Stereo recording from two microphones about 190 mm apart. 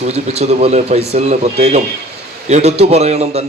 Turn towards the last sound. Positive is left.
turn(degrees=-35)  # may be behind; listen again after turning